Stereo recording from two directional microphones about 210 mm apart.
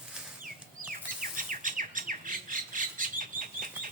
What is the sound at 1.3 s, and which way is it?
Squawk, 40° right (ahead or behind).